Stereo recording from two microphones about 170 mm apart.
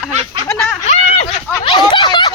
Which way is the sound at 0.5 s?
5° left (ahead or behind).